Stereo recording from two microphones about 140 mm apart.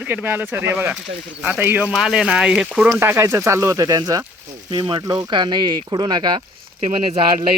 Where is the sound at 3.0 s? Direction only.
15° right (ahead or behind).